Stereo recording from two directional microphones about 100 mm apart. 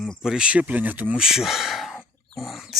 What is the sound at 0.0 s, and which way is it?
Speech, centre (ahead or behind).